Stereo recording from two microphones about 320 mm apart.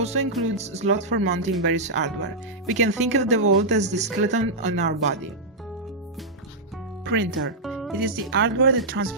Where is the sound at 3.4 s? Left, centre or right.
Right.